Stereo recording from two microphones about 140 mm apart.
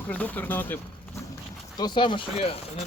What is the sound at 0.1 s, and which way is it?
Speech, 10° left (ahead or behind).